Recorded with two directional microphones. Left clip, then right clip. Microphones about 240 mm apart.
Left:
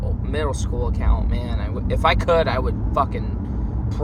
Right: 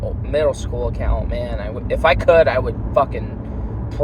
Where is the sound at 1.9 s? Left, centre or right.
Centre.